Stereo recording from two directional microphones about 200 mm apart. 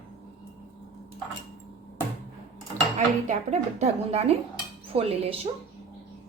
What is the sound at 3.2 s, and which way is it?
A woman's voice, 35° right (ahead or behind).